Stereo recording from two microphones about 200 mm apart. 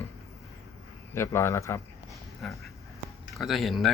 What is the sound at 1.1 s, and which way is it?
Speech, 15° left (ahead or behind).